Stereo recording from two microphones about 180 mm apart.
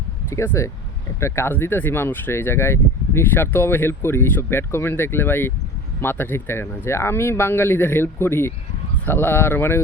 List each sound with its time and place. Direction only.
0.3 s speech: 15° left (ahead or behind)